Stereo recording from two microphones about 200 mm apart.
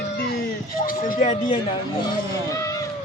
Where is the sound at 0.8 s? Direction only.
40° left (ahead or behind).